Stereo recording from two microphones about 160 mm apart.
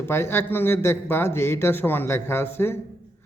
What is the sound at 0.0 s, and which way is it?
A man's voice, 15° left (ahead or behind).